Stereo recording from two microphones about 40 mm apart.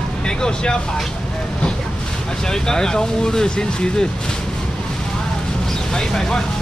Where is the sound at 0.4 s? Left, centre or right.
Centre.